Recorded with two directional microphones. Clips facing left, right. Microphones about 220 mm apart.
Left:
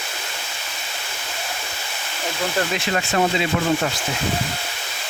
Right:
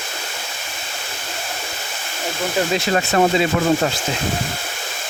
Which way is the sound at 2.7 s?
40° right (ahead or behind).